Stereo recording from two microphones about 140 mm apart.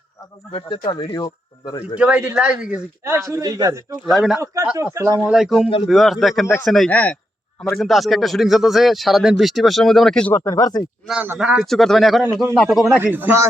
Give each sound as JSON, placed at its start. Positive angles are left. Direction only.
{"t": 0.9, "sound": "speech", "side_deg": 30}
{"t": 2.0, "sound": "speech", "side_deg": -10}
{"t": 3.0, "sound": "speech", "side_deg": -20}
{"t": 4.0, "sound": "speech", "side_deg": 0}
{"t": 4.9, "sound": "speech", "side_deg": -25}
{"t": 5.2, "sound": "speech", "side_deg": 0}
{"t": 5.6, "sound": "speech", "side_deg": 40}
{"t": 5.9, "sound": "speech", "side_deg": 0}
{"t": 10.3, "sound": "speech", "side_deg": 25}
{"t": 11.2, "sound": "speech", "side_deg": -10}
{"t": 13.0, "sound": "speech", "side_deg": -10}